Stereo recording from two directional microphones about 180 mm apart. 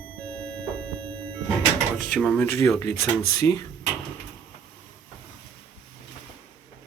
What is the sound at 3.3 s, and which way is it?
Speech, 15° left (ahead or behind).